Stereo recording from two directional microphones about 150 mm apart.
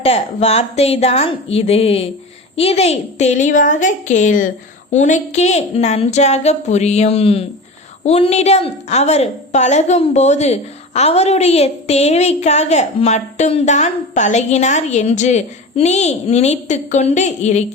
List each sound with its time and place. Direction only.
0.0 s a woman's voice: 40° left (ahead or behind)